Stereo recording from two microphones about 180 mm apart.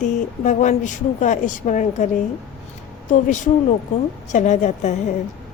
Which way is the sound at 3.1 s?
45° left (ahead or behind).